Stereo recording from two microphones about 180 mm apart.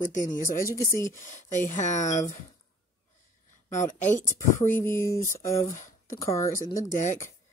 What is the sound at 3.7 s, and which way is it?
Speech, 45° left (ahead or behind).